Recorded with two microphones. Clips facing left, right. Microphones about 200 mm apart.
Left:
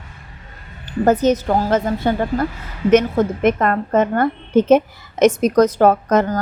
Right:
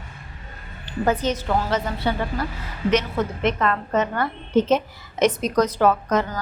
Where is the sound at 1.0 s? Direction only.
40° left (ahead or behind).